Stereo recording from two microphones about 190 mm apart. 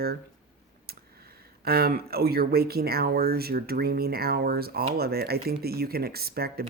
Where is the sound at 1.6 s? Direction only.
55° right (ahead or behind).